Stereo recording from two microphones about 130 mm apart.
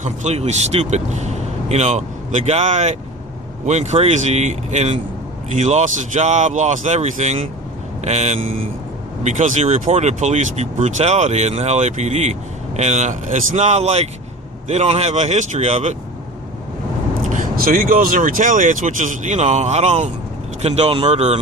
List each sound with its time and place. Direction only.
0.0 s speech: 60° right (ahead or behind)
17.2 s speech: 80° right; by 21.3 s 55° right (ahead or behind)